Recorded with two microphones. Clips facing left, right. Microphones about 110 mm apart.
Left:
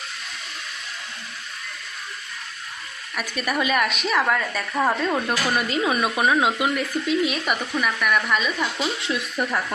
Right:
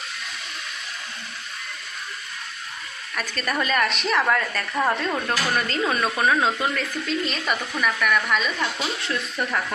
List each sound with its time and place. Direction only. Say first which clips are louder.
3.2 s a woman's voice: left 1 dB; 10° left (ahead or behind)